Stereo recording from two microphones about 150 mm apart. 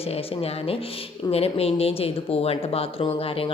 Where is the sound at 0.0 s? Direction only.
40° left (ahead or behind).